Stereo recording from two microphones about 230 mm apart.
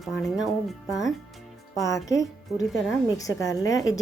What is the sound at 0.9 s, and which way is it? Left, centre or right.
Speech, centre.